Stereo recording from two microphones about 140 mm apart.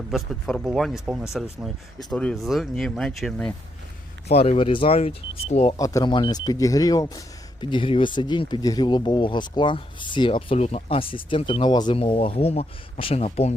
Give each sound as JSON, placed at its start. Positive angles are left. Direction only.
{"t": 0.1, "sound": "speech", "side_deg": 5}
{"t": 4.3, "sound": "speech", "side_deg": 45}
{"t": 5.7, "sound": "speech", "side_deg": 25}
{"t": 7.6, "sound": "speech", "side_deg": 35}